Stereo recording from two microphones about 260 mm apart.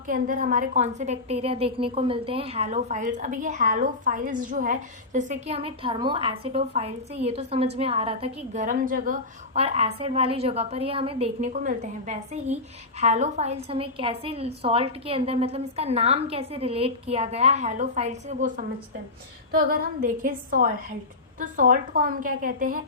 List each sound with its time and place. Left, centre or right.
0.1 s a woman's voice: right